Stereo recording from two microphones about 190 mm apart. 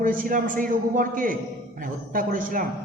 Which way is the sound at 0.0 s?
45° right (ahead or behind).